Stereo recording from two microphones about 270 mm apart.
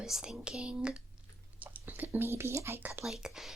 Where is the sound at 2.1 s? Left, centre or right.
Centre.